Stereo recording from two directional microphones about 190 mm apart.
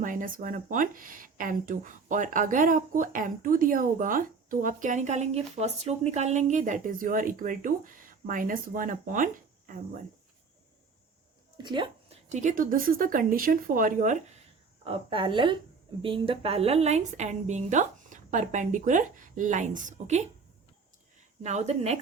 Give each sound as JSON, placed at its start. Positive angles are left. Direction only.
{"t": 0.0, "sound": "speech", "side_deg": -45}
{"t": 11.5, "sound": "speech", "side_deg": -25}
{"t": 12.3, "sound": "speech", "side_deg": -40}
{"t": 14.8, "sound": "a woman's voice", "side_deg": -25}
{"t": 21.4, "sound": "a woman's voice", "side_deg": -35}